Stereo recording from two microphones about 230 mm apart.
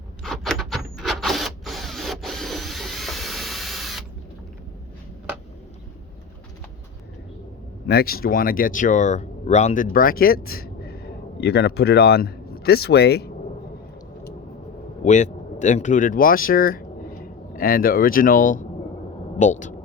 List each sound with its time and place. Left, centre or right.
0.2 s a sound: centre
7.9 s speech: left
15.0 s speech: left